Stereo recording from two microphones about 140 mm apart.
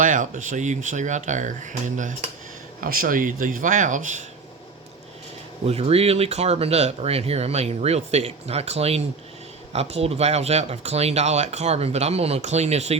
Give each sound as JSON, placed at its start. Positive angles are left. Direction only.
{"t": 0.0, "sound": "speech", "side_deg": -70}
{"t": 2.8, "sound": "speech", "side_deg": -90}
{"t": 5.6, "sound": "speech", "side_deg": -45}